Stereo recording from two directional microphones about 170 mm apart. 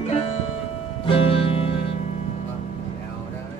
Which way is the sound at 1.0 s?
35° left (ahead or behind).